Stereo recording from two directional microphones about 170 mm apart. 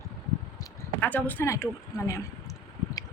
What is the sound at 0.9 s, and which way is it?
A woman's voice, 10° left (ahead or behind).